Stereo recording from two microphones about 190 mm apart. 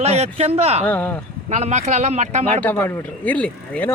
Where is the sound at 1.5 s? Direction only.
40° right (ahead or behind).